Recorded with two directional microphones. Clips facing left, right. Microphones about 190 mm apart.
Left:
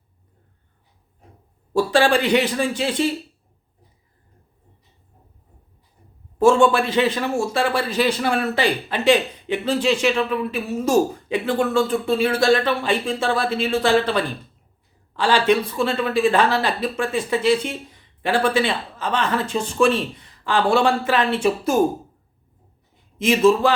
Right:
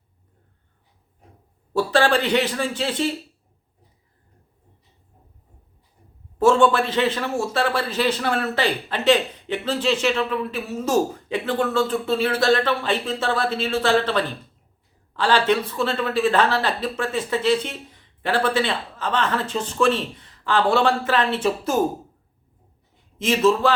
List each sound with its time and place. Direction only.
1.7 s a man's voice: 15° left (ahead or behind)
6.4 s a man's voice: 10° left (ahead or behind)
23.1 s a man's voice: 15° left (ahead or behind)